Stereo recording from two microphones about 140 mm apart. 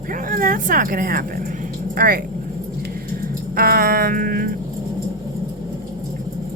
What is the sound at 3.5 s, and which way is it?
Music, 90° right.